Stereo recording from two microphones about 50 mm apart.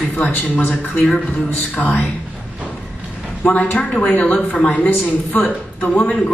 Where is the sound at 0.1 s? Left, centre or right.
Left.